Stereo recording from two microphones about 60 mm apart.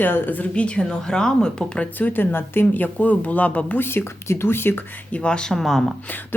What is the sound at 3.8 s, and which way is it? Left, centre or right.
A woman's voice, left.